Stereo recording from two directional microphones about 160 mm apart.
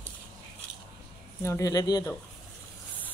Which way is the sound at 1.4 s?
20° left (ahead or behind).